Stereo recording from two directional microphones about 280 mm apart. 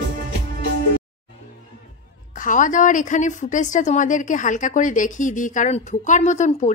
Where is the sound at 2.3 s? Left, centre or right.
Left.